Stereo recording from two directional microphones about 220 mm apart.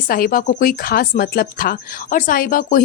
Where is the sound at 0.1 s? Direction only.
40° left (ahead or behind).